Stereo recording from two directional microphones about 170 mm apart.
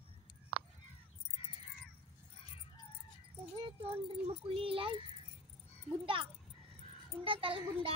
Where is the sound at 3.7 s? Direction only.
30° right (ahead or behind).